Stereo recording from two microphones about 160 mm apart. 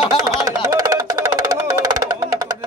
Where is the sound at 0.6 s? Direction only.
20° right (ahead or behind).